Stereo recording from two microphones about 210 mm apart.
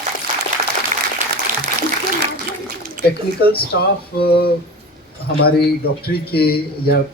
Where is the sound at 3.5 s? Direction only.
50° left (ahead or behind).